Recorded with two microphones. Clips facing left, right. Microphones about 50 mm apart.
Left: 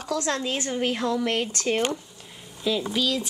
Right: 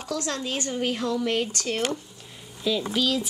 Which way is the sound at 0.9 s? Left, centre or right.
Centre.